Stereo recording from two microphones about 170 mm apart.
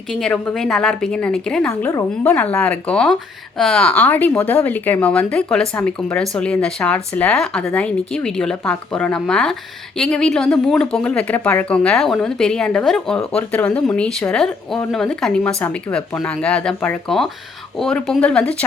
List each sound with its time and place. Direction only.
0.1 s speech: 5° left (ahead or behind)